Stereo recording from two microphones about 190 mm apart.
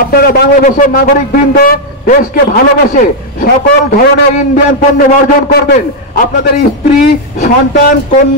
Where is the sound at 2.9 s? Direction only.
45° left (ahead or behind).